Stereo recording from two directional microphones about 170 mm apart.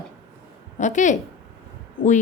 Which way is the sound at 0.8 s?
45° left (ahead or behind).